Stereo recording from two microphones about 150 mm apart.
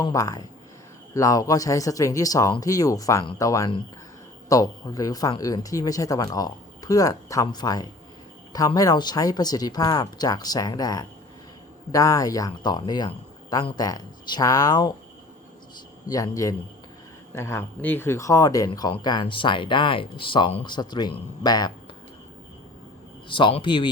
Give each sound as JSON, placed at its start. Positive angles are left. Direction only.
{"t": 0.0, "sound": "speech", "side_deg": 25}
{"t": 16.0, "sound": "speech", "side_deg": 25}
{"t": 23.3, "sound": "speech", "side_deg": 35}